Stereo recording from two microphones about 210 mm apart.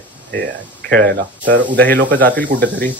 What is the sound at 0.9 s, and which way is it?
Speech, 45° right (ahead or behind).